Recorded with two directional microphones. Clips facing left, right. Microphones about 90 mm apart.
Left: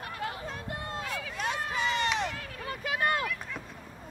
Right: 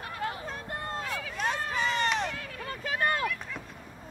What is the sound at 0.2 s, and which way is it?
Vehicle, 45° right (ahead or behind).